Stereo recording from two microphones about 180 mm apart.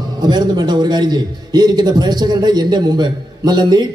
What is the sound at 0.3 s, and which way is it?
A man's voice, 25° right (ahead or behind).